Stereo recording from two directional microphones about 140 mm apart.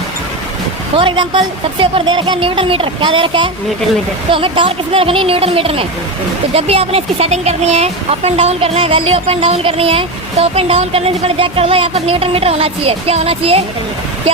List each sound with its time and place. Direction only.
0.9 s speech: 35° right (ahead or behind)